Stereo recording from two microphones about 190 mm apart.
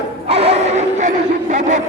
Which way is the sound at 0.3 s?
30° right (ahead or behind).